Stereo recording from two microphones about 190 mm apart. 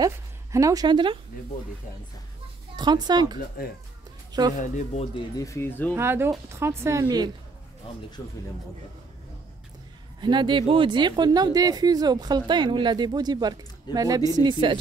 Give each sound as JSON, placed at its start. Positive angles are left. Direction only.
{"t": 0.0, "sound": "a woman's voice", "side_deg": -15}
{"t": 2.7, "sound": "a woman's voice", "side_deg": -20}
{"t": 3.3, "sound": "speech", "side_deg": 50}
{"t": 4.3, "sound": "speech", "side_deg": -20}
{"t": 4.6, "sound": "speech", "side_deg": 40}
{"t": 5.4, "sound": "speech", "side_deg": 15}
{"t": 5.9, "sound": "speech", "side_deg": -10}
{"t": 8.2, "sound": "speech", "side_deg": 15}
{"t": 10.2, "sound": "a woman's voice", "side_deg": -25}